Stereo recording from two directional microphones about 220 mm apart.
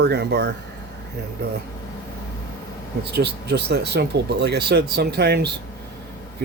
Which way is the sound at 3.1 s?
50° right (ahead or behind).